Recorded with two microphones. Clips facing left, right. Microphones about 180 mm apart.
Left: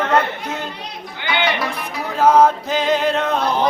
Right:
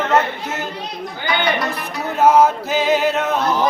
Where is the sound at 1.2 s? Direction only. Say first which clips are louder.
Right 1 dB; centre (ahead or behind).